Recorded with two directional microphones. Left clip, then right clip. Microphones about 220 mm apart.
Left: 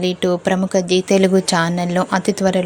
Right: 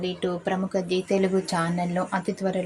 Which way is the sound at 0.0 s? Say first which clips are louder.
Left 10 dB; 40° left (ahead or behind).